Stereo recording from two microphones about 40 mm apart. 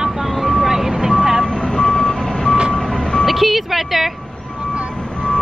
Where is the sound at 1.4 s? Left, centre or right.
Left.